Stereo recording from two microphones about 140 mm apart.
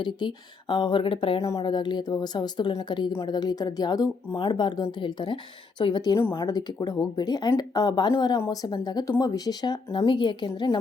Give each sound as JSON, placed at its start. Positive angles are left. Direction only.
{"t": 0.0, "sound": "speech", "side_deg": 35}
{"t": 1.4, "sound": "speech", "side_deg": 25}